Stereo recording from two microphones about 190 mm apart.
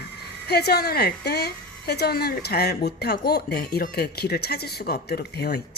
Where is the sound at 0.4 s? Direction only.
60° left (ahead or behind).